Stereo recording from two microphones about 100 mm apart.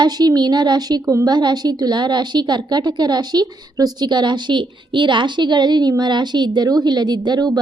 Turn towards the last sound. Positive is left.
turn(degrees=-45)  # may be behind; listen again after turning